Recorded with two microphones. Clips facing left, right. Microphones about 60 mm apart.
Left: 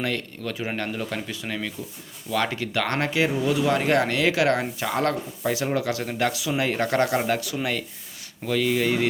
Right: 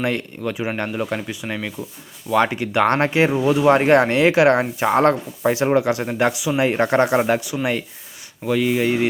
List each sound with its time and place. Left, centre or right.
0.0 s speech: right
7.4 s speech: centre